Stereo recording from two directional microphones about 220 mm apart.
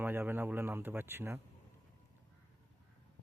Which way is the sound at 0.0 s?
10° right (ahead or behind).